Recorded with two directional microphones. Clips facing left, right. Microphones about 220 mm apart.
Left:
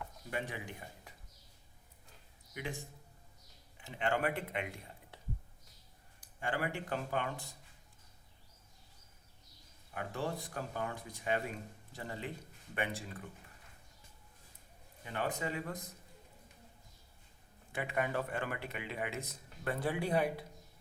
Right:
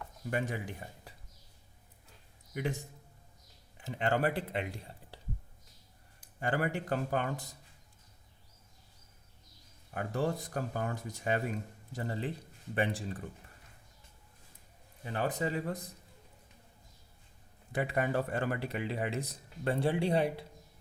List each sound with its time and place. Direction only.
0.3 s speech: 45° right (ahead or behind)
3.8 s speech: 40° right (ahead or behind)
6.4 s speech: 40° right (ahead or behind)
9.9 s speech: 40° right (ahead or behind)
15.0 s speech: 35° right (ahead or behind)
17.7 s speech: 40° right (ahead or behind)